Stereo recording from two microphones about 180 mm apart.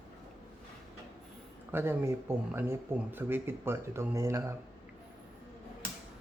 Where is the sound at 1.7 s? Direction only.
15° right (ahead or behind).